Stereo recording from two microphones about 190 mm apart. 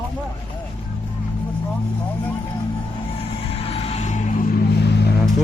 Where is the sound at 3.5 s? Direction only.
30° left (ahead or behind).